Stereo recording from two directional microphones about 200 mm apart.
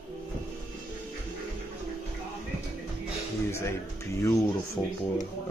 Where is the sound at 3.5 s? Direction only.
15° left (ahead or behind).